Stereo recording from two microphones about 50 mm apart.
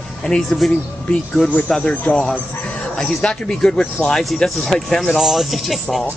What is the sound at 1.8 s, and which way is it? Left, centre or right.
Speech, centre.